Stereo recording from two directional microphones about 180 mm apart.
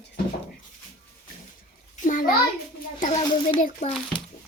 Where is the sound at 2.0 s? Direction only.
50° left (ahead or behind).